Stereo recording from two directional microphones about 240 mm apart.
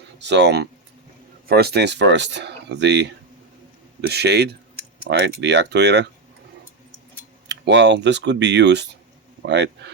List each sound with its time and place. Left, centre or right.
0.2 s speech: right
7.4 s speech: right